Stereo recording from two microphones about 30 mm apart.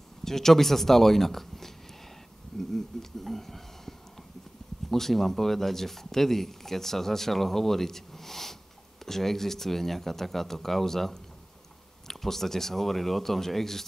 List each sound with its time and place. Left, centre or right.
0.2 s speech: centre
2.7 s a sound: centre
4.9 s speech: centre